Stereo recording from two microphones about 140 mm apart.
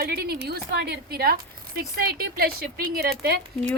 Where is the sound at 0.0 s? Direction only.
90° right.